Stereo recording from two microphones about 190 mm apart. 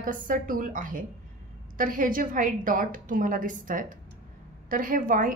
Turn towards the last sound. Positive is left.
turn(degrees=-45)  # may be behind; listen again after turning